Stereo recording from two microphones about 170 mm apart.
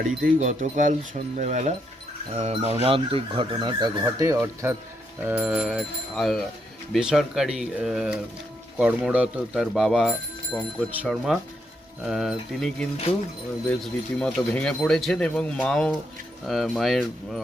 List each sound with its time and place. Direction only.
0.3 s speech: 50° right (ahead or behind); by 17.4 s centre (ahead or behind)